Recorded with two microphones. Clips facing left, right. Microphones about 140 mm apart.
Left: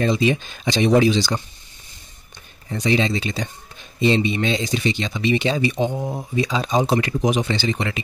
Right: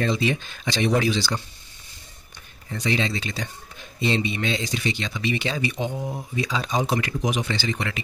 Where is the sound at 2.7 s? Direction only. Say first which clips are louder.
Left 5 dB; 20° left (ahead or behind).